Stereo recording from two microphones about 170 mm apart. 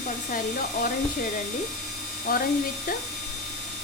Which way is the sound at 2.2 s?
60° left (ahead or behind).